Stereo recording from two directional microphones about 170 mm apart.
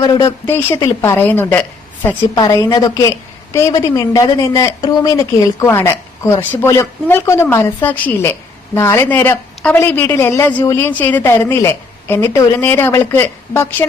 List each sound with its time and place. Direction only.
0.0 s speech: 20° left (ahead or behind)